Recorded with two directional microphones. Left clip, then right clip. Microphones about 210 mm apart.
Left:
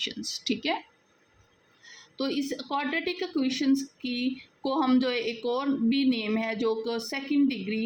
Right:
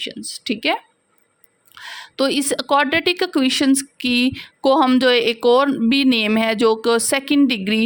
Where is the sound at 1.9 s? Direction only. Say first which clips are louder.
Right 12 dB; 50° right (ahead or behind).